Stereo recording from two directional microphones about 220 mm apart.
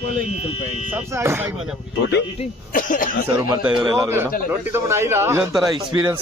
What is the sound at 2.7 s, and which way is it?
Speech, 40° left (ahead or behind).